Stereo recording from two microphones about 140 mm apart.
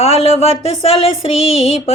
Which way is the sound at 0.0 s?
45° left (ahead or behind).